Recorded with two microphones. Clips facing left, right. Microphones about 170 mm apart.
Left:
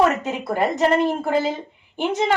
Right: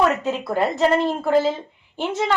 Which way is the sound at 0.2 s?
15° left (ahead or behind).